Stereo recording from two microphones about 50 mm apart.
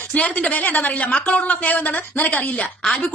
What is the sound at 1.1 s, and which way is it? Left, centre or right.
Speech, left.